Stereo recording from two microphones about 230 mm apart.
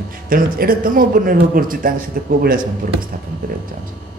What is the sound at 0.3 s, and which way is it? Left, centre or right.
Speech, right.